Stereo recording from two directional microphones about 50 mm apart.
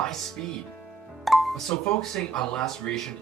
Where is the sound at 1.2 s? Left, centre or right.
Centre.